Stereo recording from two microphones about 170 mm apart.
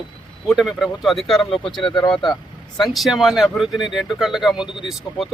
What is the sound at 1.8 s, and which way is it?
Speech, 30° left (ahead or behind).